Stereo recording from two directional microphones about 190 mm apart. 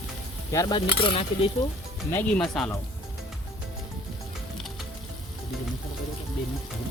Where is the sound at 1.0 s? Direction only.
30° left (ahead or behind).